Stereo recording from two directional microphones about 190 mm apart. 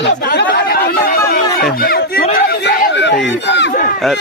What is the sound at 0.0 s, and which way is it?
Chatter, 55° left (ahead or behind).